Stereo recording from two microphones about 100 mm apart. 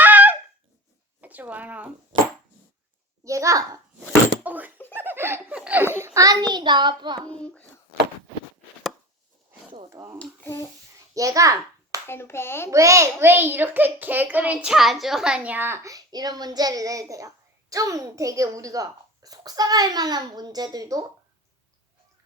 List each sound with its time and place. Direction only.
0.0 s a sound: 15° right (ahead or behind)
3.2 s a child's voice: 35° right (ahead or behind)
4.4 s door: 15° right (ahead or behind)
4.9 s laughter: 20° right (ahead or behind)
5.5 s laughter: 10° right (ahead or behind)
5.8 s a sound: 25° right (ahead or behind)
6.1 s a child's voice: 40° right (ahead or behind)
7.3 s speech: 10° left (ahead or behind)
10.2 s speech: 15° left (ahead or behind)
11.1 s a child's voice: 35° right (ahead or behind)
12.0 s speech: 25° left (ahead or behind)
12.7 s a child's voice: 30° right (ahead or behind)